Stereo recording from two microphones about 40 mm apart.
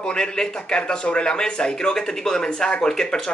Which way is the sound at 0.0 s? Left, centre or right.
Left.